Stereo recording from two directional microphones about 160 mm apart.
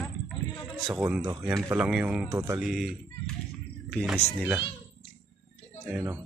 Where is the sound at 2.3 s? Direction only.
20° right (ahead or behind).